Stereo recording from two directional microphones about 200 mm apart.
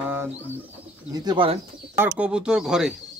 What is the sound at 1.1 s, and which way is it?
Speech, 20° right (ahead or behind).